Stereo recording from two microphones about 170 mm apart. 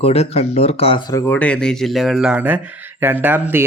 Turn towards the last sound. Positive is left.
turn(degrees=-10)  # may be behind; listen again after turning